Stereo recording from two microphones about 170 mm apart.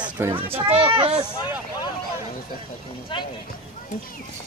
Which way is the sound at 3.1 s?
30° left (ahead or behind).